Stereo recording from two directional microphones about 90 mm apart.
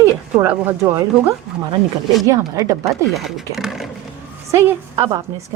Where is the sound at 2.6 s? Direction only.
40° right (ahead or behind).